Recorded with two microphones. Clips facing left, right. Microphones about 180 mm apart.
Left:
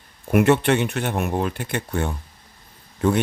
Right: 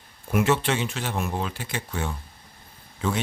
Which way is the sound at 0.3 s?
60° left (ahead or behind).